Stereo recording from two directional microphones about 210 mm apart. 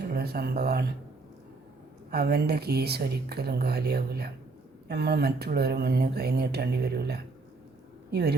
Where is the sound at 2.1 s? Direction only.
50° right (ahead or behind).